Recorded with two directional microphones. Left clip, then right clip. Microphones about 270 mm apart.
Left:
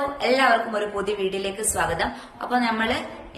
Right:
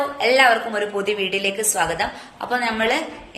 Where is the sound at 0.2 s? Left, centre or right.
Centre.